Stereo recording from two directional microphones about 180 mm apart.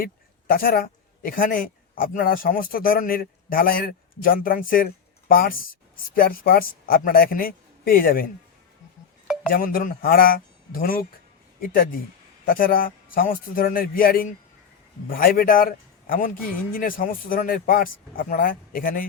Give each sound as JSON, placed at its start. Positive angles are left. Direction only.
{"t": 0.0, "sound": "a woman's voice", "side_deg": 55}
{"t": 9.5, "sound": "speech", "side_deg": 50}